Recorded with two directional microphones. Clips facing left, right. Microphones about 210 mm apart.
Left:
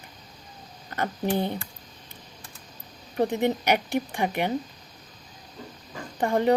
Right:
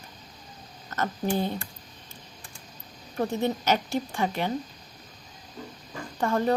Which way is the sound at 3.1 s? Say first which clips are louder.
Left 3 dB; 20° left (ahead or behind).